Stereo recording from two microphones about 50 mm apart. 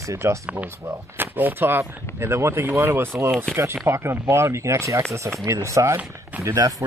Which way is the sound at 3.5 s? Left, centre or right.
Right.